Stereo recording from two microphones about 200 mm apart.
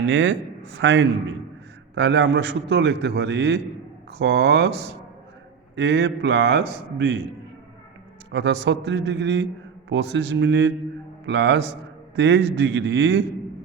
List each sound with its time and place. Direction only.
0.1 s a man's voice: 65° right (ahead or behind)
8.3 s a man's voice: 60° right (ahead or behind)